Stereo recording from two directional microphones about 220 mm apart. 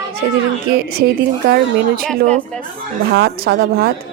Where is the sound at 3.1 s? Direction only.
50° right (ahead or behind).